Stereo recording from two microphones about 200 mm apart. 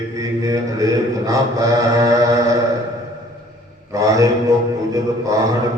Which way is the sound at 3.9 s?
15° right (ahead or behind).